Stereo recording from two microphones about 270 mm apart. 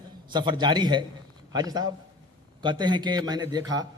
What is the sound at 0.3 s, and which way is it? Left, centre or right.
A man's voice, centre.